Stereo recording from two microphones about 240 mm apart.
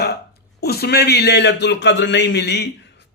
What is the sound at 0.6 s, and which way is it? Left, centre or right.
Speech, left.